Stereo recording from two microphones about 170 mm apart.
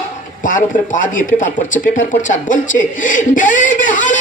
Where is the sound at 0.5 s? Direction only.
50° left (ahead or behind).